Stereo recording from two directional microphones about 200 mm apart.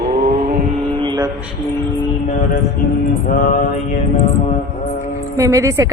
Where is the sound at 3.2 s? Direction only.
45° left (ahead or behind).